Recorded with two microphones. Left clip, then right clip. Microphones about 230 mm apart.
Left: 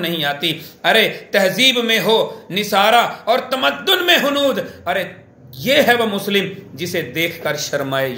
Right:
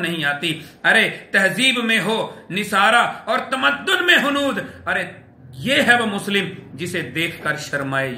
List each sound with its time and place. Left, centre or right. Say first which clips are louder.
0.0 s a man's voice: left 2 dB; centre